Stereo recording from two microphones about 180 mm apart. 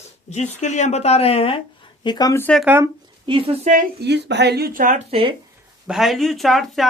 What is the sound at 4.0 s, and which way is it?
Speech, 70° right (ahead or behind).